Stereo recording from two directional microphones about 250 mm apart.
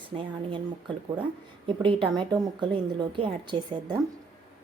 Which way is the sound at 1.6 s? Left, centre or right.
Centre.